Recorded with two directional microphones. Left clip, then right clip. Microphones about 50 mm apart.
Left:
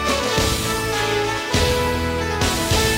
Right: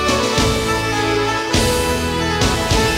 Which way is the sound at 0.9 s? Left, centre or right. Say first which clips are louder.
Right 3 dB; right.